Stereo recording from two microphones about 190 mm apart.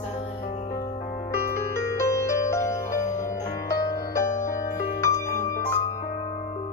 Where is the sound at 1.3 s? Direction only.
15° left (ahead or behind).